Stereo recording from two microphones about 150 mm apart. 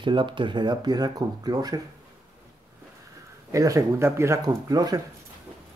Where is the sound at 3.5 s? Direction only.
20° right (ahead or behind).